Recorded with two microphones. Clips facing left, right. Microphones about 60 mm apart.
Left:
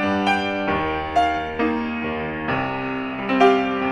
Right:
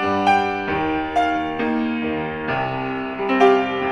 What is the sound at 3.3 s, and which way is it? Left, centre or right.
Music, right.